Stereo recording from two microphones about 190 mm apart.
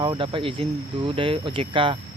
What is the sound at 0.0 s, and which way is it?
Speech, 25° right (ahead or behind).